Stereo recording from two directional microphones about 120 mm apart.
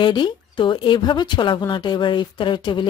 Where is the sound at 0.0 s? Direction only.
40° left (ahead or behind).